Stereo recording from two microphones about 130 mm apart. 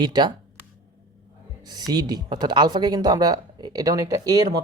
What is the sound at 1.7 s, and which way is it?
Speech, 30° right (ahead or behind).